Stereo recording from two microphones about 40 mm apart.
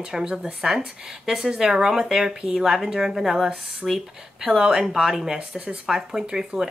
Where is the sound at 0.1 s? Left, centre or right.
Centre.